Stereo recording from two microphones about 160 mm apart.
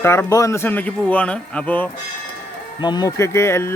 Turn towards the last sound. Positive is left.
turn(degrees=15)  # may be behind; listen again after turning